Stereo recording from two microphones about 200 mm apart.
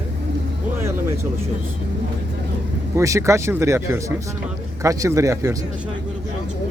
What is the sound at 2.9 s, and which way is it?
Speech, 15° right (ahead or behind).